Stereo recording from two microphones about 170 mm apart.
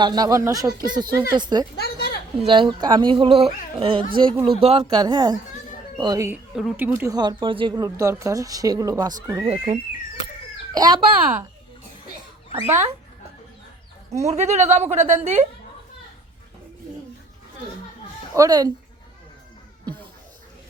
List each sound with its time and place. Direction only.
0.0 s speech: 25° right (ahead or behind)
1.7 s a sound: 70° left (ahead or behind)
2.4 s a woman's voice: 30° right (ahead or behind)
4.9 s speech: 25° right (ahead or behind)
6.5 s speech: 5° right (ahead or behind); by 9.5 s 20° right (ahead or behind)
10.8 s speech: 25° right (ahead or behind)
12.5 s speech: 15° right (ahead or behind)
14.2 s a woman's voice: 40° right (ahead or behind)
18.3 s speech: 20° right (ahead or behind)